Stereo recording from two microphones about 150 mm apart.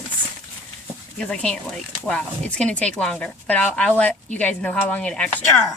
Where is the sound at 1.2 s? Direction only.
5° left (ahead or behind).